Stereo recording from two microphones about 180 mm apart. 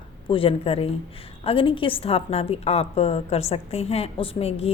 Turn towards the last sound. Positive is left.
turn(degrees=35)  # may be behind; listen again after turning